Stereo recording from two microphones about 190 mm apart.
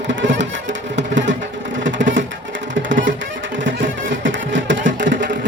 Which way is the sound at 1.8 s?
75° right (ahead or behind).